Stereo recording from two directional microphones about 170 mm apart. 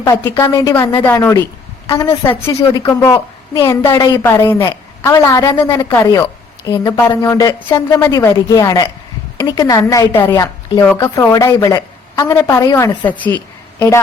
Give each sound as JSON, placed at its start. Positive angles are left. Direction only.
{"t": 0.0, "sound": "a woman's voice", "side_deg": 20}
{"t": 1.0, "sound": "a woman's voice", "side_deg": 15}
{"t": 13.3, "sound": "a sound", "side_deg": 15}